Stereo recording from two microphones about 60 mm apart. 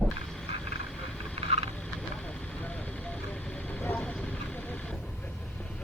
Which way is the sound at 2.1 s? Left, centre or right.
Left.